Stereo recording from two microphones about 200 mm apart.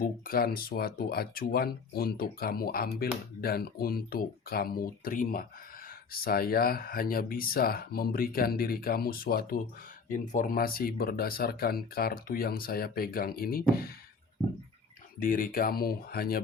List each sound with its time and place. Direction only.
0.0 s speech: 45° left (ahead or behind)
15.2 s speech: 45° left (ahead or behind)